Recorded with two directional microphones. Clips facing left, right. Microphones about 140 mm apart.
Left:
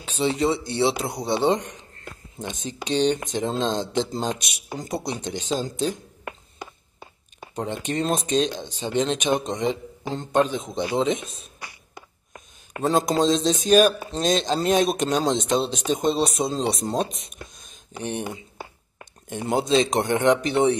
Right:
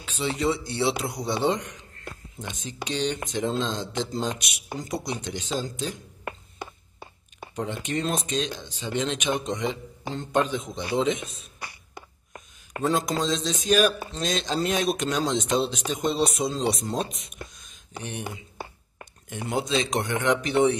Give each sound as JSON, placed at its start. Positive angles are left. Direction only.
{"t": 0.0, "sound": "speech", "side_deg": 25}
{"t": 7.5, "sound": "speech", "side_deg": 30}
{"t": 12.8, "sound": "speech", "side_deg": 30}